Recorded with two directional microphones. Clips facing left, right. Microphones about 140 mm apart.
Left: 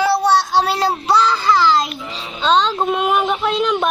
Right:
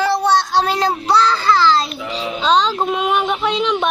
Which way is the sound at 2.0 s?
90° right.